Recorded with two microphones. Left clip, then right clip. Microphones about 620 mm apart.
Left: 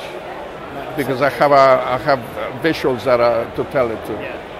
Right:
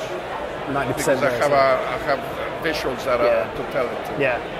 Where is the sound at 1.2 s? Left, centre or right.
Left.